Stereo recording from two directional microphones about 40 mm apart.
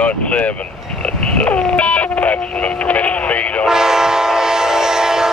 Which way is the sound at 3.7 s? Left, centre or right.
Centre.